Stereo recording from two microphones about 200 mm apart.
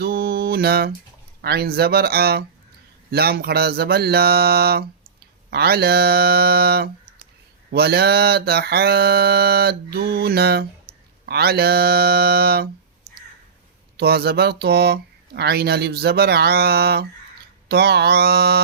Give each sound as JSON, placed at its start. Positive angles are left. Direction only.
{"t": 0.0, "sound": "mantra", "side_deg": -50}
{"t": 13.9, "sound": "mantra", "side_deg": -50}